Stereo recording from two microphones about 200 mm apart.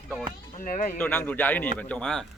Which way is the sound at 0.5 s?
40° left (ahead or behind).